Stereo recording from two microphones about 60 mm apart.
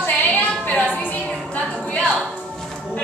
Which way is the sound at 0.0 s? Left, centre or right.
Left.